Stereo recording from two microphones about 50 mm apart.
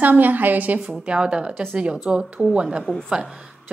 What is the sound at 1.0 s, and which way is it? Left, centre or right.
A woman's voice, centre.